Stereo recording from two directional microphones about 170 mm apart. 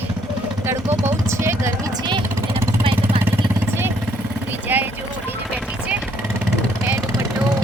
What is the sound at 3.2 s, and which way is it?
Vehicle, 15° right (ahead or behind).